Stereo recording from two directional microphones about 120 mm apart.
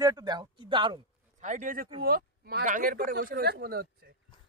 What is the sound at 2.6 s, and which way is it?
Speech, 90° right.